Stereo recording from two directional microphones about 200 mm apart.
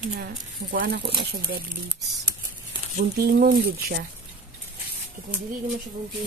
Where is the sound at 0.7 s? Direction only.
50° right (ahead or behind).